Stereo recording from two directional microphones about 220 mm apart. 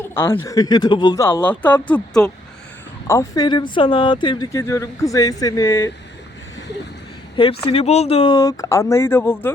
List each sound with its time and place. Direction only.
0.0 s a sound: 10° left (ahead or behind)
0.3 s speech: 15° left (ahead or behind)
3.1 s speech: 15° left (ahead or behind)
7.6 s speech: 25° left (ahead or behind); by 9.5 s 10° left (ahead or behind)